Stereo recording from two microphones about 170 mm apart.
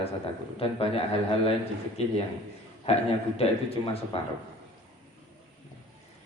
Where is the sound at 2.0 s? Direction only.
40° left (ahead or behind).